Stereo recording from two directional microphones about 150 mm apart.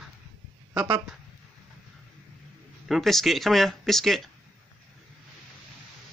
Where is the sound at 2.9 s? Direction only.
Centre (ahead or behind).